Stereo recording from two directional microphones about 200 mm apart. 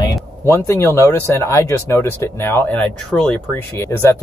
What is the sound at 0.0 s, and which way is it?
Speech, 15° left (ahead or behind).